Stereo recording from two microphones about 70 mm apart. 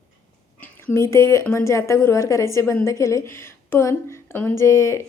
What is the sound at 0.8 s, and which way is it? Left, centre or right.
A woman's voice, left.